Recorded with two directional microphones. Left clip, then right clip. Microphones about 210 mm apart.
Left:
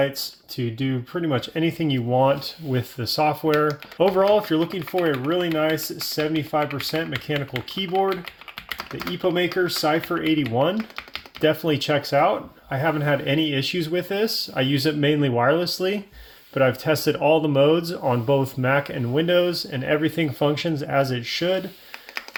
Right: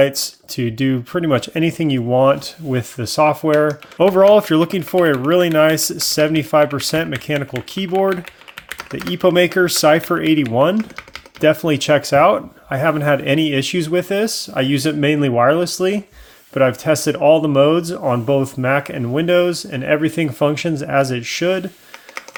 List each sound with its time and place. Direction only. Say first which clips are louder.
0.0 s speech: right 8 dB; 40° right (ahead or behind)
9.1 s speech: right 9 dB; 45° right (ahead or behind); by 21.6 s 25° right (ahead or behind)